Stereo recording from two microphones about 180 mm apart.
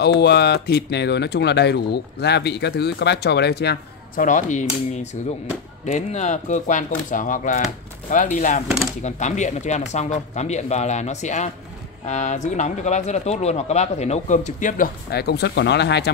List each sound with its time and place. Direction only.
0.0 s speech: 65° left (ahead or behind)
4.2 s speech: 45° left (ahead or behind); by 16.1 s 70° left (ahead or behind)